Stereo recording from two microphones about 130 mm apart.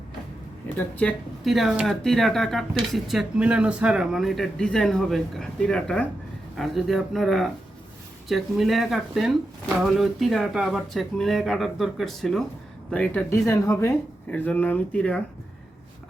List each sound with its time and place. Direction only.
1.5 s speech: centre (ahead or behind)
13.3 s speech: 25° left (ahead or behind)
14.3 s speech: 10° left (ahead or behind)